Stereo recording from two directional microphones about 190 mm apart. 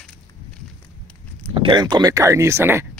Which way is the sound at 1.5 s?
25° right (ahead or behind).